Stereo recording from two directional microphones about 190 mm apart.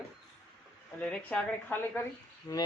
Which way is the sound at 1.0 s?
5° left (ahead or behind).